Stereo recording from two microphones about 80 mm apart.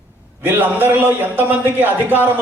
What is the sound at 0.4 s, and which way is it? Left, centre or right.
Speech, right.